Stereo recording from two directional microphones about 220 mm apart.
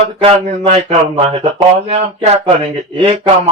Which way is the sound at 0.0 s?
30° right (ahead or behind).